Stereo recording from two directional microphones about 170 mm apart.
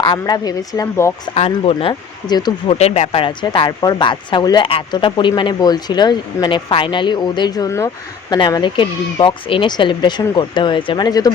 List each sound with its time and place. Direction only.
0.0 s speech: 25° left (ahead or behind)
1.3 s speech: 35° left (ahead or behind)
2.7 s speech: 40° left (ahead or behind); by 11.3 s 25° left (ahead or behind)